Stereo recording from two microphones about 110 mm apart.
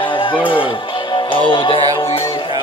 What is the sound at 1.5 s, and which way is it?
Speech, 50° left (ahead or behind).